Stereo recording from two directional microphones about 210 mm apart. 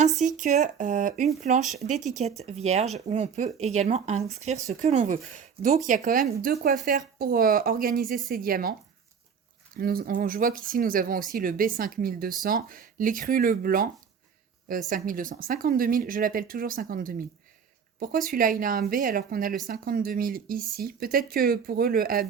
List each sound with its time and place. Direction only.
0.2 s speech: 35° right (ahead or behind)
9.7 s speech: 45° right (ahead or behind)
14.8 s speech: 40° right (ahead or behind)